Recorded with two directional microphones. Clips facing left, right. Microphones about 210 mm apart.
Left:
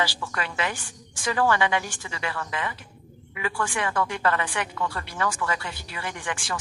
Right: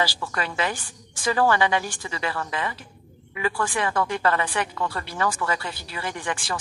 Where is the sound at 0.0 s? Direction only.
35° right (ahead or behind).